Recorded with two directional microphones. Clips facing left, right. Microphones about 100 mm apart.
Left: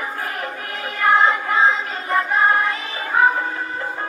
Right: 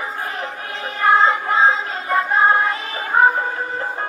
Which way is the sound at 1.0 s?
30° right (ahead or behind).